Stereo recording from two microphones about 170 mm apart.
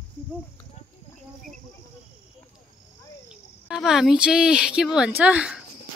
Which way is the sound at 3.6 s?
5° right (ahead or behind).